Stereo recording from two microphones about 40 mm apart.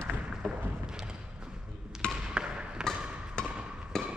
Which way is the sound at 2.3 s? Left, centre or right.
Right.